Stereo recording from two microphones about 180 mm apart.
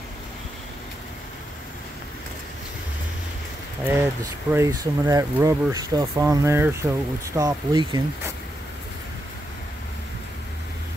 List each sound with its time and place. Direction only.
3.8 s speech: 10° right (ahead or behind)